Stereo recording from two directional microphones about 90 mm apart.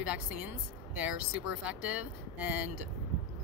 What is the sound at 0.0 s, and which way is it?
Speech, 15° right (ahead or behind).